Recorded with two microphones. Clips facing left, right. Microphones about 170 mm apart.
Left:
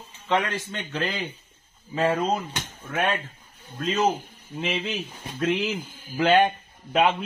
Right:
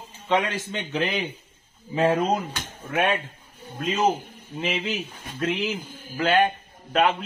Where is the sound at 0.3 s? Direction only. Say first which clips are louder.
Right 1 dB; 20° right (ahead or behind).